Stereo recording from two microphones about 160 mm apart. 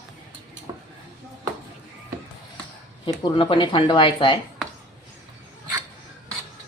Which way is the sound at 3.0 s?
30° left (ahead or behind).